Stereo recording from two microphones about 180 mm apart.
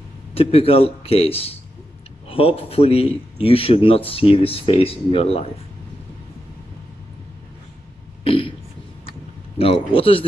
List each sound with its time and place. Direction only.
0.3 s speech: 30° left (ahead or behind)
8.2 s burping: 30° left (ahead or behind)
9.9 s speech: 30° left (ahead or behind)